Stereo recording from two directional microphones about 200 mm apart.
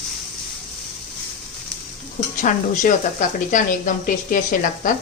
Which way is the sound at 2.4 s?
40° left (ahead or behind).